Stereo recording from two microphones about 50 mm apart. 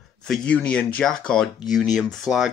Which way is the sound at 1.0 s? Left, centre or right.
Centre.